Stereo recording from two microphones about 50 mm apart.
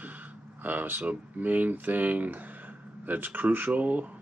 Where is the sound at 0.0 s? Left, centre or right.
Right.